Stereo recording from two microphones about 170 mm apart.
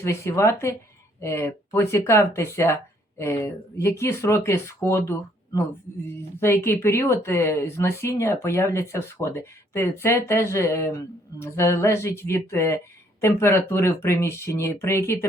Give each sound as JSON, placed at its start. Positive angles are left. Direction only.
{"t": 0.0, "sound": "a woman's voice", "side_deg": 15}
{"t": 6.3, "sound": "a woman's voice", "side_deg": 15}